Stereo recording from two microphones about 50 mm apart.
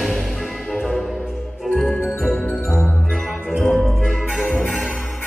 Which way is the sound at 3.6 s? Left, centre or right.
Centre.